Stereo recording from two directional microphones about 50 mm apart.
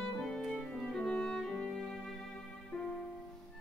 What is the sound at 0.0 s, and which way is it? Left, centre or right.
Music, centre.